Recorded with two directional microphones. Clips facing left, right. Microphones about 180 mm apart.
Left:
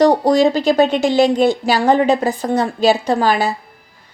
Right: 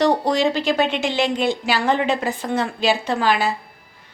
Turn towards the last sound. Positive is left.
turn(degrees=40)  # may be behind; listen again after turning